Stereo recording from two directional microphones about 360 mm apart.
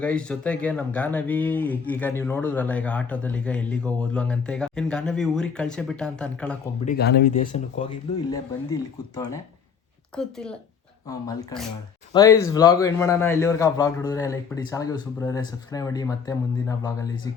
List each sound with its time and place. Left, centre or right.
0.0 s speech: centre
6.8 s speech: left
8.3 s a man's voice: centre